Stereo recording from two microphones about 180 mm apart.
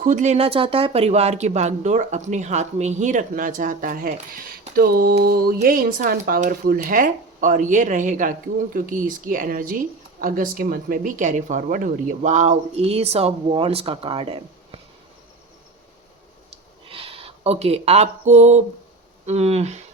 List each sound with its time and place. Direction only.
0.0 s speech: 45° right (ahead or behind)
16.9 s speech: 30° right (ahead or behind)